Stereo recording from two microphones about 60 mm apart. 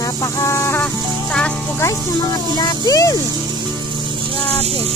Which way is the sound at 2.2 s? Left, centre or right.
Left.